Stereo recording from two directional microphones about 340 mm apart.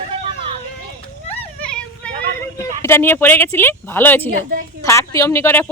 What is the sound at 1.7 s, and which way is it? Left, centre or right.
Children playing, centre.